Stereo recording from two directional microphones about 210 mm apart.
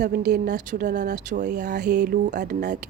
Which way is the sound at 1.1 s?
35° right (ahead or behind).